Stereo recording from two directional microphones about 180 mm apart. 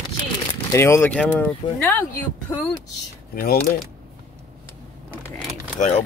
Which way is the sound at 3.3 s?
55° left (ahead or behind).